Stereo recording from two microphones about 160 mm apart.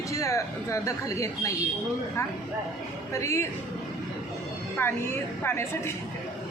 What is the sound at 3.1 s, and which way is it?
Speech, 20° left (ahead or behind).